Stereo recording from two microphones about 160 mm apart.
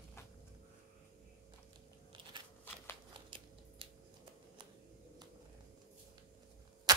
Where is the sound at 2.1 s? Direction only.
30° right (ahead or behind).